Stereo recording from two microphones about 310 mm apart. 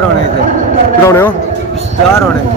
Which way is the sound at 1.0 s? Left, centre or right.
Centre.